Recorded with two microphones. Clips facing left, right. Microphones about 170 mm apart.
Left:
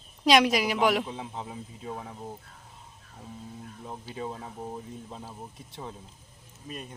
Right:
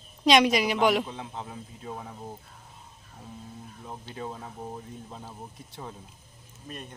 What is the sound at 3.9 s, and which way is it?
Speech, 5° left (ahead or behind).